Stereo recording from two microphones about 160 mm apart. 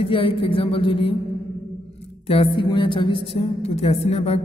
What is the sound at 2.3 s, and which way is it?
A woman's voice, 35° left (ahead or behind).